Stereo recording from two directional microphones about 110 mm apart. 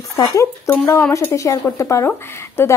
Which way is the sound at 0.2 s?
30° left (ahead or behind).